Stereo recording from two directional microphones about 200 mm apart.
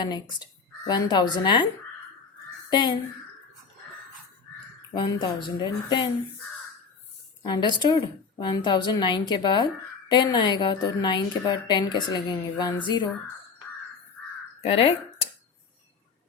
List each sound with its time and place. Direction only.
0.0 s a woman's voice: 20° left (ahead or behind)
2.6 s speech: 20° left (ahead or behind)
4.9 s a woman's voice: 20° left (ahead or behind)
7.4 s a woman's voice: 20° left (ahead or behind)
14.6 s speech: 25° left (ahead or behind)